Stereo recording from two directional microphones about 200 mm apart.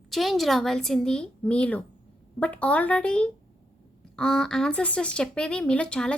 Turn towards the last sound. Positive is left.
turn(degrees=5)  # may be behind; listen again after turning